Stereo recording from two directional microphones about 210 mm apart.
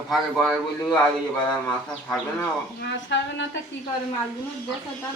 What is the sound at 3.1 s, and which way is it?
Speech, 55° left (ahead or behind).